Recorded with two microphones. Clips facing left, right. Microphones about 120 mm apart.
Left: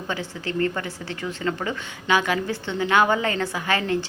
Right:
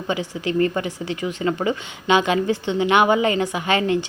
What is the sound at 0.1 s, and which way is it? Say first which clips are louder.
A woman's voice: right 6 dB; 15° right (ahead or behind).